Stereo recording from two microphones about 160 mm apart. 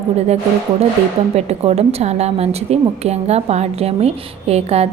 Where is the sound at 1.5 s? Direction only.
40° right (ahead or behind).